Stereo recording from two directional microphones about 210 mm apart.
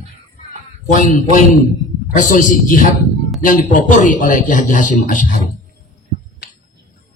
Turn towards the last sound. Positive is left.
turn(degrees=40)  # may be behind; listen again after turning